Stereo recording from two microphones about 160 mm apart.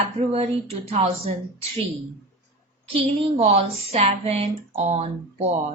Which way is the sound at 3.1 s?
40° right (ahead or behind).